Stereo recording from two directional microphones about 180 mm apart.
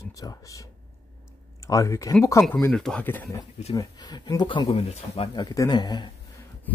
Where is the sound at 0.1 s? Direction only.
20° left (ahead or behind).